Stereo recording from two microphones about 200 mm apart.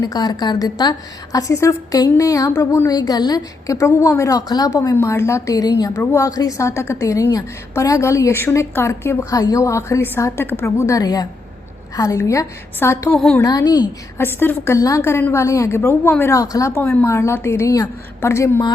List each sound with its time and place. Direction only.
0.0 s a woman's voice: 20° left (ahead or behind); by 13.4 s 5° left (ahead or behind)
13.4 s a woman's voice: 15° left (ahead or behind)